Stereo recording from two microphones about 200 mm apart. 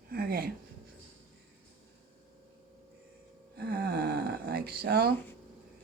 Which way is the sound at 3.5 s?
50° right (ahead or behind).